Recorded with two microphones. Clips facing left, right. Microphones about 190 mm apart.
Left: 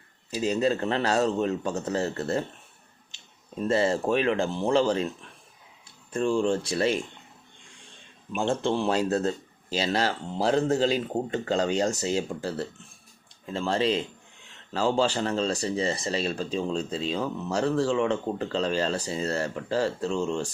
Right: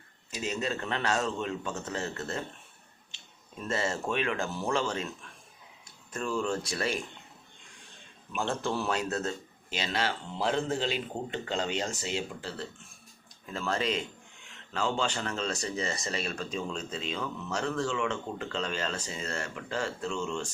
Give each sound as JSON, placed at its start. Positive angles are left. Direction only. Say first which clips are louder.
{"t": 0.3, "sound": "speech", "louder": "left 8 dB", "side_deg": 35}
{"t": 3.6, "sound": "speech", "louder": "left 8 dB", "side_deg": 30}
{"t": 6.1, "sound": "speech", "louder": "left 7 dB", "side_deg": 30}
{"t": 8.4, "sound": "speech", "louder": "left 6 dB", "side_deg": 30}
{"t": 13.4, "sound": "speech", "louder": "left 6 dB", "side_deg": 30}